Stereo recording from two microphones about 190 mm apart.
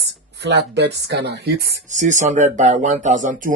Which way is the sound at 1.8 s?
40° right (ahead or behind).